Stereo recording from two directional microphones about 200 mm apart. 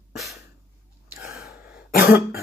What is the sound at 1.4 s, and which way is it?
Cough, 50° left (ahead or behind).